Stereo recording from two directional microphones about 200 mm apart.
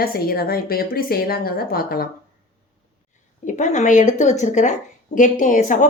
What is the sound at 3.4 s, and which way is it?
A woman's voice, 40° left (ahead or behind).